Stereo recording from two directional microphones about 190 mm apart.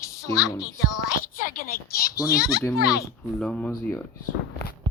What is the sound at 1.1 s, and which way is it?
Speech, 45° left (ahead or behind).